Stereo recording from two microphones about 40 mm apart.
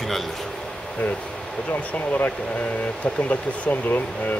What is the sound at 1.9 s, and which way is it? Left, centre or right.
Speech, left.